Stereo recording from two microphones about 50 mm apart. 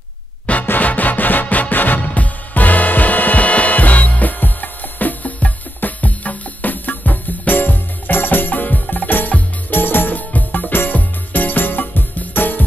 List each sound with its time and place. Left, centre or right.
0.7 s music: left